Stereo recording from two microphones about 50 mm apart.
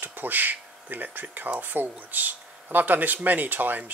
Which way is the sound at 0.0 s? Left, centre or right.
Right.